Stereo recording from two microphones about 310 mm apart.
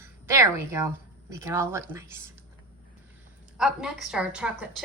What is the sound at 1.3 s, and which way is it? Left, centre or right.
Speech, centre.